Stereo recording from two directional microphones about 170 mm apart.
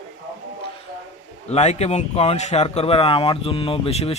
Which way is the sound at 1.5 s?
40° left (ahead or behind).